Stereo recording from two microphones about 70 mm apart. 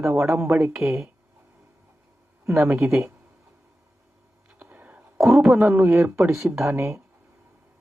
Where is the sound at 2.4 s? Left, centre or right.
Right.